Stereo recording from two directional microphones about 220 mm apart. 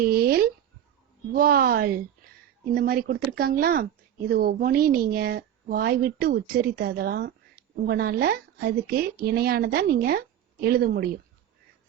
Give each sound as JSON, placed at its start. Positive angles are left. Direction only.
{"t": 0.0, "sound": "speech", "side_deg": -45}